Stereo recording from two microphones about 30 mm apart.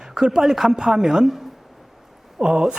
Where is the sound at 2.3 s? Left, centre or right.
Right.